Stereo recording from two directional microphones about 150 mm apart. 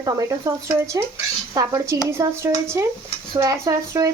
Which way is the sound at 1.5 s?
25° right (ahead or behind).